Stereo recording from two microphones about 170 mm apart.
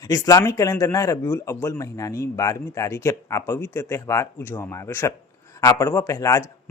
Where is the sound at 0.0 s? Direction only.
20° left (ahead or behind).